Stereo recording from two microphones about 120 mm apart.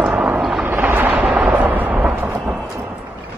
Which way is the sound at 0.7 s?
15° right (ahead or behind).